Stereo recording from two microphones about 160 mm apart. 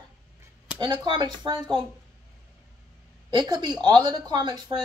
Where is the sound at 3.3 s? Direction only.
30° right (ahead or behind).